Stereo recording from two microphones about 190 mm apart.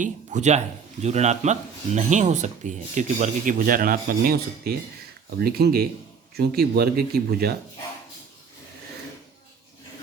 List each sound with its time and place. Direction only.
0.0 s speech: 40° right (ahead or behind)